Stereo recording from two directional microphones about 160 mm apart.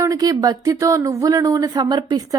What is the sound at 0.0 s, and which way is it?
Speech, 20° right (ahead or behind).